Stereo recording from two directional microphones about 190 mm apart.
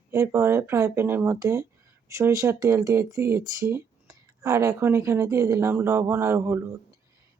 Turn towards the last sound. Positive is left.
turn(degrees=-10)  # may be behind; listen again after turning